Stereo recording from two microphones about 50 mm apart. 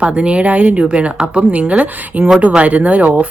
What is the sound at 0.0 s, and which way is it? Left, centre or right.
Speech, right.